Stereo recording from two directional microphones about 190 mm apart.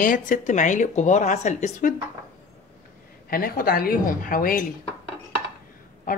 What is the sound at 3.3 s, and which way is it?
Speech, 50° left (ahead or behind).